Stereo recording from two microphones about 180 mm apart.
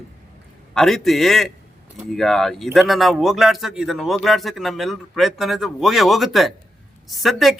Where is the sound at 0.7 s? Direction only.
Centre (ahead or behind).